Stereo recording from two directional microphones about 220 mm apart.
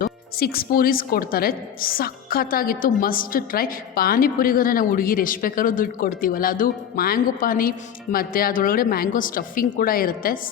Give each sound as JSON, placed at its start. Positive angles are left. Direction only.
{"t": 0.0, "sound": "a woman's voice", "side_deg": 45}